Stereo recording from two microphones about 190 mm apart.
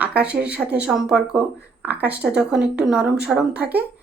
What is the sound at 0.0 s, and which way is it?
A woman's voice, 5° right (ahead or behind).